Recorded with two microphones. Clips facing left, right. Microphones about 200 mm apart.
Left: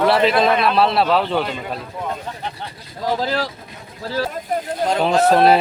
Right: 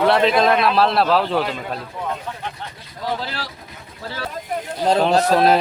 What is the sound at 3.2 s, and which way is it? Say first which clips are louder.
Speech: left 8 dB; 40° left (ahead or behind).